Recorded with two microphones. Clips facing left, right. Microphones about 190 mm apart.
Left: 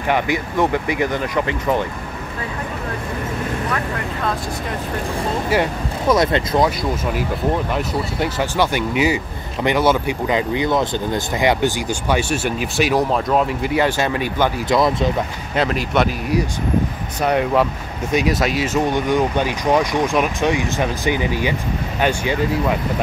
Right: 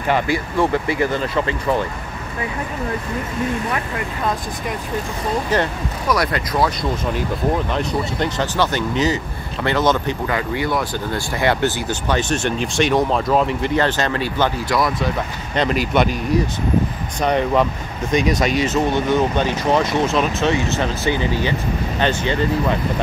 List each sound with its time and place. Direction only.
0.1 s speech: 15° left (ahead or behind)
6.0 s speech: 25° left (ahead or behind)
7.7 s speech: 10° left (ahead or behind)
15.5 s speech: centre (ahead or behind)